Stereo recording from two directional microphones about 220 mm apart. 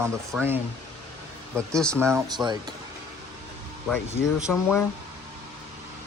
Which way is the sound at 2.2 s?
20° right (ahead or behind).